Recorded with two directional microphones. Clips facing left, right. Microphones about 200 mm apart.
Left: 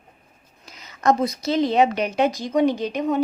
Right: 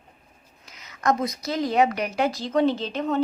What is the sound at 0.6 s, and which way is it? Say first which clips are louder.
A woman's voice: left 4 dB; 30° left (ahead or behind).